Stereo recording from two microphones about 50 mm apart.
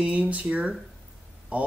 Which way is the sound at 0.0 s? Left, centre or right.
Right.